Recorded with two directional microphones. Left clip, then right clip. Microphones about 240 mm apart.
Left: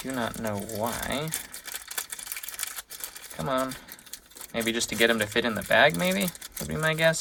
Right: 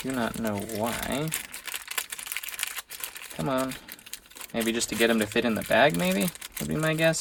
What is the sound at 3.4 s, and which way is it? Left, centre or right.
Speech, right.